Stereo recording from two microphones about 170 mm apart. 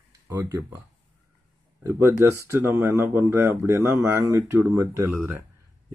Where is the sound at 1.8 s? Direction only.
15° right (ahead or behind).